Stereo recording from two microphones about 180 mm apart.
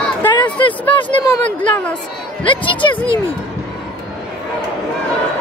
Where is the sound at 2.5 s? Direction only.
25° left (ahead or behind).